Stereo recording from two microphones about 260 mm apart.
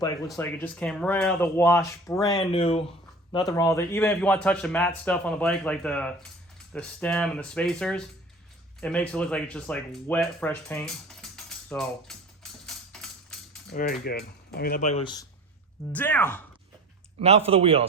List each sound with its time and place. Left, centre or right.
0.3 s a man's voice: centre
13.7 s speech: left
15.9 s speech: centre
17.2 s speech: right